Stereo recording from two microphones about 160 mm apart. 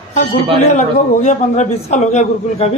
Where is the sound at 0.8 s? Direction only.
45° left (ahead or behind).